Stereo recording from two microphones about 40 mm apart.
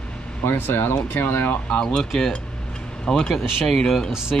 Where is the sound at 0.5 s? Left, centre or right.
Left.